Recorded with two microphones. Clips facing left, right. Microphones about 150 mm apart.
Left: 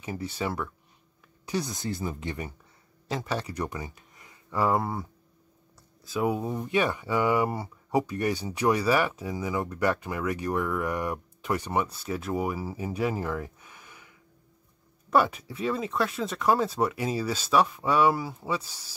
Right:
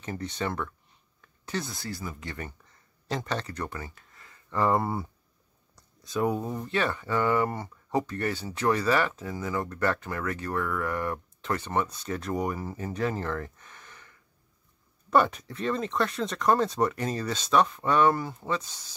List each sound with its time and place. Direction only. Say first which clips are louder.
0.0 s speech: even; 10° left (ahead or behind); by 2.3 s 25° left (ahead or behind)
3.1 s speech: left 1 dB; 5° left (ahead or behind)